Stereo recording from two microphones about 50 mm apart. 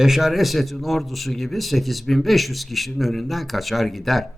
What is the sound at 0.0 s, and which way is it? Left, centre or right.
Speech, centre.